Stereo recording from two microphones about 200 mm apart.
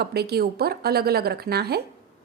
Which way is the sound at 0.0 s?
55° right (ahead or behind).